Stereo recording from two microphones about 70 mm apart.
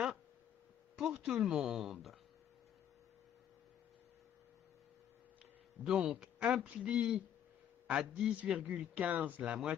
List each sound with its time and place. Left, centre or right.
0.9 s speech: centre
5.9 s a man's voice: centre